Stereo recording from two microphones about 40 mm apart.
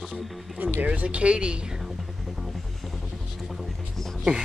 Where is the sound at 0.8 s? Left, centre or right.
Right.